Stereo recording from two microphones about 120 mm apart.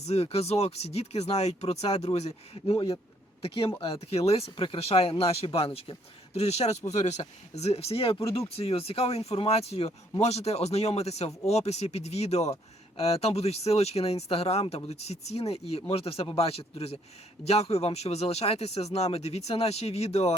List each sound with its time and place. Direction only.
0.0 s a man's voice: 60° left (ahead or behind)